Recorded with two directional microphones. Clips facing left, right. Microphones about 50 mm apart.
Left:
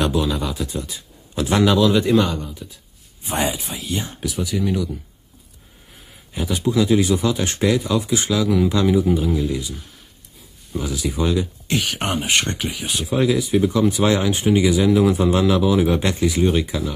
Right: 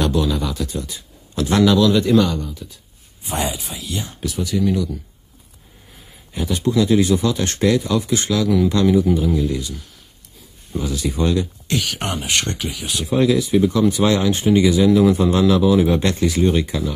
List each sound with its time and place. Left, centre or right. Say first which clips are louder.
0.0 s speech: right 1 dB; centre
1.3 s speech: right 2 dB; centre
4.2 s speech: right 5 dB; centre
6.3 s speech: right 1 dB; centre
10.8 s speech: right 1 dB; centre
11.6 s speech: even; centre